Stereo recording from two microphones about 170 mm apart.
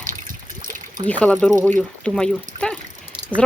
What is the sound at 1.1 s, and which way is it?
Speech, 5° left (ahead or behind).